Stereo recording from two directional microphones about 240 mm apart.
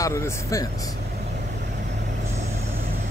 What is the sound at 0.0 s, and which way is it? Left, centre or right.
Speech, centre.